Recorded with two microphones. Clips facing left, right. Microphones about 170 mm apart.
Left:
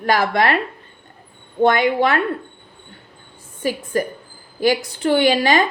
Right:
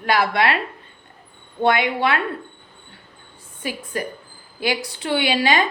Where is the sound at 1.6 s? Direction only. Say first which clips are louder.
Left 3 dB; 45° left (ahead or behind).